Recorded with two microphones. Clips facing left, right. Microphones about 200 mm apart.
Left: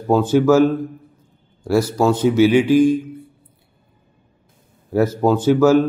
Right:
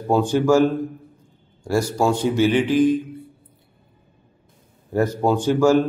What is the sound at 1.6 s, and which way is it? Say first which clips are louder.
Speech: left 3 dB; 10° right (ahead or behind).